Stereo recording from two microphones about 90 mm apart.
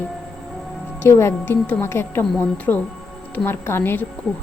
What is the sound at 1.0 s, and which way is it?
Speech, 30° left (ahead or behind).